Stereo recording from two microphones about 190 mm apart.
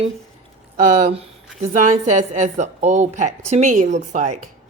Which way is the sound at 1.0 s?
30° right (ahead or behind).